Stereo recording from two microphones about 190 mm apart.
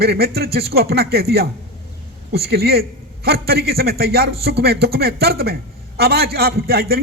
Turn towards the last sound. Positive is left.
turn(degrees=-55)  # may be behind; listen again after turning